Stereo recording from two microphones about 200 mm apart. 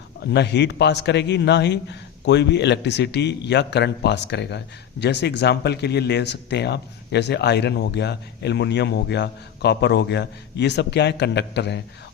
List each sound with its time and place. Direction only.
0.3 s a man's voice: 60° left (ahead or behind)